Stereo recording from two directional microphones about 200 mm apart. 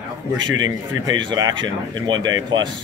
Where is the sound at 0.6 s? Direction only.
20° right (ahead or behind).